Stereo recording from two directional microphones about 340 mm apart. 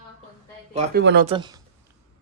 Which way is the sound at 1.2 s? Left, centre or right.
Centre.